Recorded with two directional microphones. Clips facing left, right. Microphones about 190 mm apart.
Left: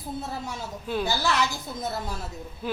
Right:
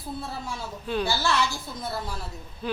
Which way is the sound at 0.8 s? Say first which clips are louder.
Even; 10° left (ahead or behind).